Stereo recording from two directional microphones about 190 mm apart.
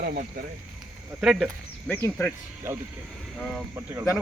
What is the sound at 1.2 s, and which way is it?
Speech, centre (ahead or behind).